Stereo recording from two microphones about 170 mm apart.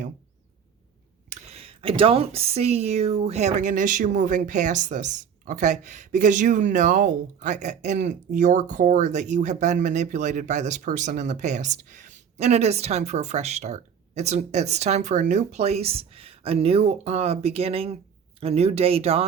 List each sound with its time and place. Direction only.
1.3 s speech: 40° right (ahead or behind)